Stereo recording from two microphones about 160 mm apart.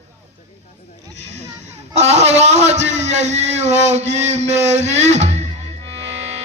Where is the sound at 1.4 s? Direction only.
45° right (ahead or behind).